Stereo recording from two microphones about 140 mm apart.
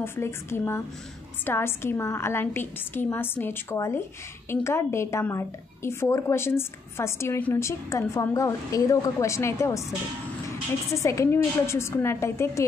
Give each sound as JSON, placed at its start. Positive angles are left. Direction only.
{"t": 0.0, "sound": "a woman's voice", "side_deg": 20}